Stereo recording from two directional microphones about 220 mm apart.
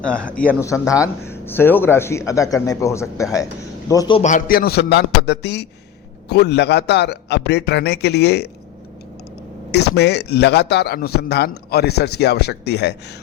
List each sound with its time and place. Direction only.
0.0 s speech: 5° left (ahead or behind)
4.2 s a man's voice: 35° left (ahead or behind)
9.9 s a man's voice: 50° left (ahead or behind)